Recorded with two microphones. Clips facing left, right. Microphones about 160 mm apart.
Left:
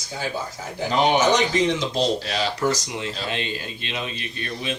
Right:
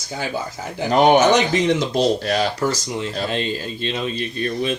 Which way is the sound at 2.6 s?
35° right (ahead or behind).